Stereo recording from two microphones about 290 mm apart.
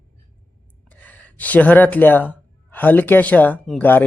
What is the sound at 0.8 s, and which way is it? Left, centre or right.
Speech, centre.